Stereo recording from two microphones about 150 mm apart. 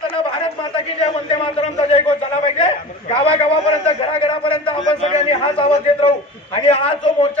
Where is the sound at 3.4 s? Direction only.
35° left (ahead or behind).